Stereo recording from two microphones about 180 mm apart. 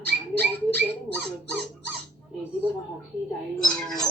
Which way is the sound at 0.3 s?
10° left (ahead or behind).